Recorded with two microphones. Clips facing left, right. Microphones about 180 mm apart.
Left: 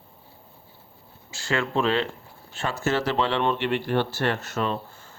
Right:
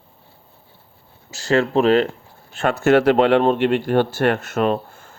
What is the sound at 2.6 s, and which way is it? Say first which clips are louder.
Speech: right 10 dB; 60° right (ahead or behind).